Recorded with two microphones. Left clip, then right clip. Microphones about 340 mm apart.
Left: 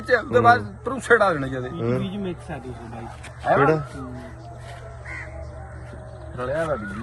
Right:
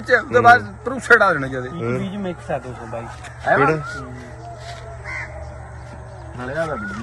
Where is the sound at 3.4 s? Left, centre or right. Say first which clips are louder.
Right 2 dB; centre.